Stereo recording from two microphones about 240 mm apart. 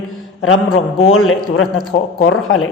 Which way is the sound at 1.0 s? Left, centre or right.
Left.